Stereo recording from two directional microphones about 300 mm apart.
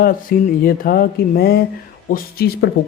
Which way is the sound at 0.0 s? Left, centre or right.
Left.